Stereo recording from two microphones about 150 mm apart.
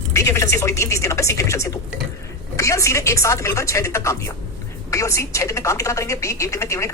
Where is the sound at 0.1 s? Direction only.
20° left (ahead or behind).